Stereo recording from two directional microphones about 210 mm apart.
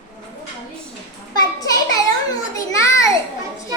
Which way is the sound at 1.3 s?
20° left (ahead or behind).